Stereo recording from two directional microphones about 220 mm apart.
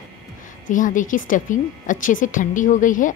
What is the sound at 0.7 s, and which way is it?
A woman's voice, 35° left (ahead or behind).